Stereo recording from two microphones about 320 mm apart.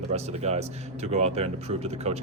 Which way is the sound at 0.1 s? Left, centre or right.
Centre.